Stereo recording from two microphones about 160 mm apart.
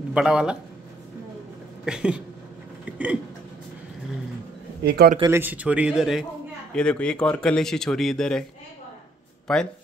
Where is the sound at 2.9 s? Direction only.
10° right (ahead or behind).